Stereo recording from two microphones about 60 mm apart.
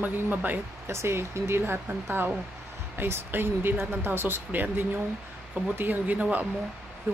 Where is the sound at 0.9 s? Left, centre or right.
Right.